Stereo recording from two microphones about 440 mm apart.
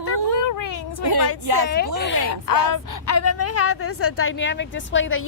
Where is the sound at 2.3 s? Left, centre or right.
Left.